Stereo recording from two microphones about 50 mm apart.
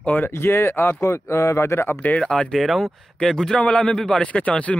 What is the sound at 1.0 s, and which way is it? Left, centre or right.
Speech, left.